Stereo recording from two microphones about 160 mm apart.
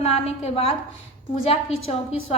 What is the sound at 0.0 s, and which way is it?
A woman's voice, 40° left (ahead or behind).